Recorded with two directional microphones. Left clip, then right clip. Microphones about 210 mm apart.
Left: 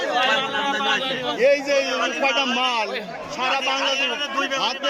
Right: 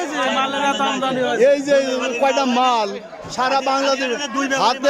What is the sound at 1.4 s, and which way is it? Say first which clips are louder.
A man's voice: right 3 dB; 20° right (ahead or behind).